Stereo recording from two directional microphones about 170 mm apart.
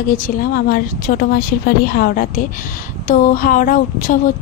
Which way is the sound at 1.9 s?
55° left (ahead or behind).